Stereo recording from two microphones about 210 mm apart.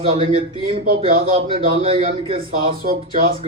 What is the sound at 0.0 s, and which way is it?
A man's voice, 25° right (ahead or behind).